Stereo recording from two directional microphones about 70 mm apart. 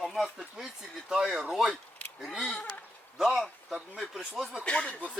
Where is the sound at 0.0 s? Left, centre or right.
Centre.